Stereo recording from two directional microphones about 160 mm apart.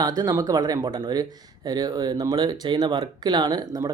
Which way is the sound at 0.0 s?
25° right (ahead or behind).